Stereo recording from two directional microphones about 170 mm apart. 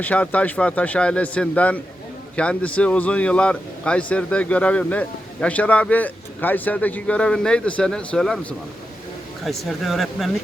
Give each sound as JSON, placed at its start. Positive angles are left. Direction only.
{"t": 0.0, "sound": "speech", "side_deg": 10}